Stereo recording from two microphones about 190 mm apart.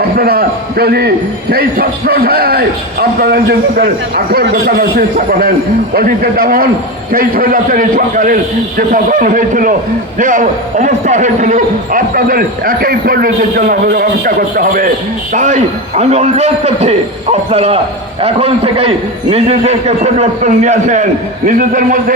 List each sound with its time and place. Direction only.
0.2 s a man's voice: 55° right (ahead or behind)
16.0 s a man's voice: 35° right (ahead or behind)